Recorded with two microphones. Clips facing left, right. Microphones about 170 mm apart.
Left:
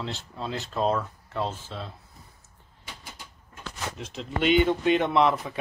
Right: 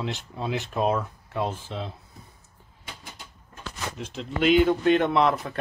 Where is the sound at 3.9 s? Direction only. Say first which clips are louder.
Right 2 dB; centre (ahead or behind).